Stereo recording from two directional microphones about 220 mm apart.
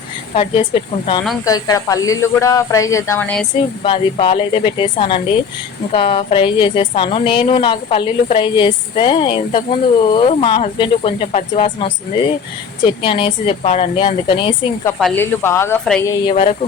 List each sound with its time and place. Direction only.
0.3 s a woman's voice: 25° left (ahead or behind); by 3.4 s 5° left (ahead or behind)
3.8 s a woman's voice: 25° left (ahead or behind)
14.9 s speech: 5° left (ahead or behind)
16.2 s a woman's voice: 25° left (ahead or behind)